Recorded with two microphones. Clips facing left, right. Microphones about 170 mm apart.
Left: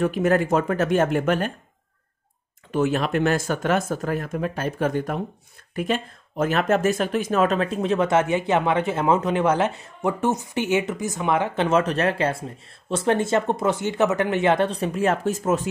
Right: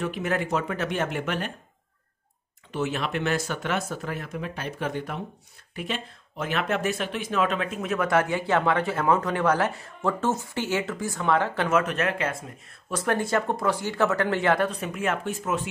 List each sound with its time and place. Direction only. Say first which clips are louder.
0.0 s speech: left 7 dB; 45° left (ahead or behind)
2.7 s speech: left 6 dB; 45° left (ahead or behind)